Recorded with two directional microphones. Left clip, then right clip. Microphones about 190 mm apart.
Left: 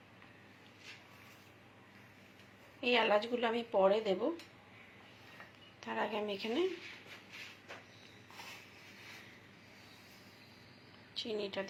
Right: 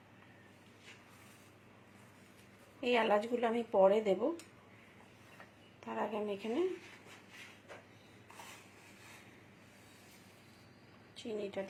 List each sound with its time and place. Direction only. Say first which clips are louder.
2.8 s a woman's voice: left 1 dB; 15° right (ahead or behind)
5.8 s a woman's voice: left 1 dB; 10° right (ahead or behind)
11.2 s a woman's voice: left 2 dB; 10° right (ahead or behind)